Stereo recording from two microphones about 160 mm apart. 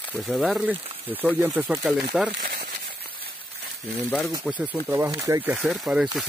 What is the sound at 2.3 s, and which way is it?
Speech, 75° right (ahead or behind).